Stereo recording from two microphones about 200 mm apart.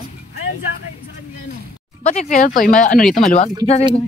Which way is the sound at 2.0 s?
35° left (ahead or behind).